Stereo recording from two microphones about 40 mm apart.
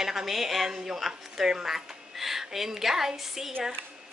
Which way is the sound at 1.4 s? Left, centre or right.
Centre.